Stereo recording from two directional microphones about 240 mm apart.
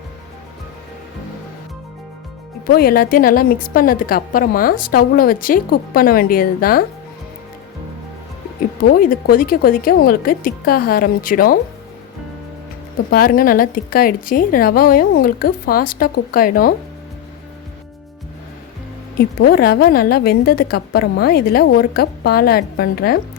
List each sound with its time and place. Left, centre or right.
2.7 s a woman's voice: left
8.8 s a woman's voice: left
13.1 s a woman's voice: left
19.2 s a woman's voice: left